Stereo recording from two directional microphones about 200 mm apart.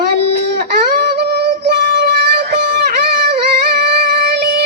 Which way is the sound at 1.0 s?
55° right (ahead or behind).